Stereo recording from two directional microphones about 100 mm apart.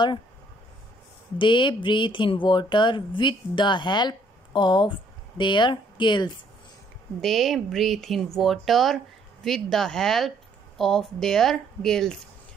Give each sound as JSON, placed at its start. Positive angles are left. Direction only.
{"t": 1.4, "sound": "speech", "side_deg": 55}
{"t": 7.2, "sound": "speech", "side_deg": 0}